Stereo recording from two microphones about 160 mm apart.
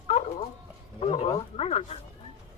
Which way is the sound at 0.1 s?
40° left (ahead or behind).